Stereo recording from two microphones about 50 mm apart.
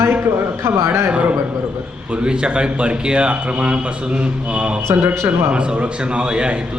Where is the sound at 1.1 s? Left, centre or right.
Right.